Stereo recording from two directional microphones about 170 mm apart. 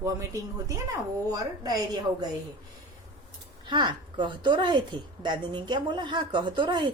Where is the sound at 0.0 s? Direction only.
20° right (ahead or behind).